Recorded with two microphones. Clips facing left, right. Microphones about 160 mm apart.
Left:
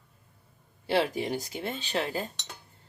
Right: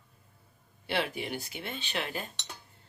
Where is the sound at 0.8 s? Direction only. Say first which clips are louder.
Left 6 dB; 35° left (ahead or behind).